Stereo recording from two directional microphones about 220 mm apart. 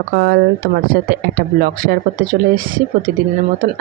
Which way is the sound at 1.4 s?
40° right (ahead or behind).